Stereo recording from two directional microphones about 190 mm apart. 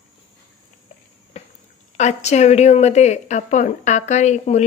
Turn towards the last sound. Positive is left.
turn(degrees=35)  # may be behind; listen again after turning